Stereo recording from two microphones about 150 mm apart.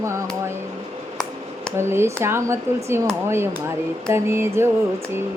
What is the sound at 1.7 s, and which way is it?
Speech, 15° right (ahead or behind).